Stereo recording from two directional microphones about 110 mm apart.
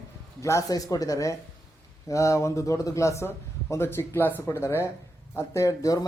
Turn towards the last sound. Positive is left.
turn(degrees=30)  # may be behind; listen again after turning